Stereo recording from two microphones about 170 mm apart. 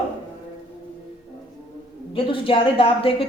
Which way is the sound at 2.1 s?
30° left (ahead or behind).